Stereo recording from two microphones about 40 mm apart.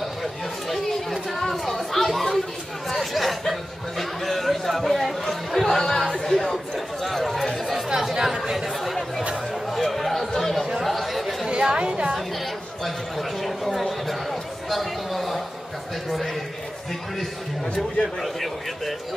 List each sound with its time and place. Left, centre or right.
0.0 s chatter: centre
2.9 s speech: centre
4.0 s chatter: centre
8.1 s chatter: centre
11.6 s music: right
13.4 s a sound: centre
18.2 s a man's voice: centre